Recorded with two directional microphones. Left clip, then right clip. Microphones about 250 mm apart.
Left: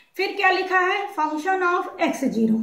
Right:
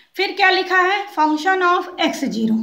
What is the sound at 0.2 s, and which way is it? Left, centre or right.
A woman's voice, right.